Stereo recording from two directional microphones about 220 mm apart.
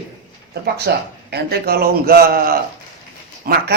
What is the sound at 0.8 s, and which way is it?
A man's voice, 50° right (ahead or behind).